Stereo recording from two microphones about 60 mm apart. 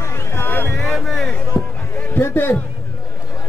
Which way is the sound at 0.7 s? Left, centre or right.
Centre.